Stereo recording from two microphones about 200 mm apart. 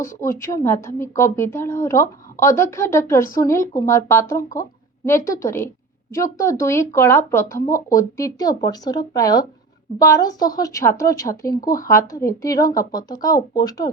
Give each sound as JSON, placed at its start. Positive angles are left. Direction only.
{"t": 0.0, "sound": "a woman's voice", "side_deg": 15}